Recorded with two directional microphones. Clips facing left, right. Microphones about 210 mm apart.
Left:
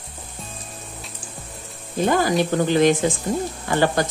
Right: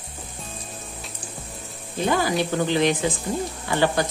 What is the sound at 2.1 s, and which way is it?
Speech, 45° left (ahead or behind).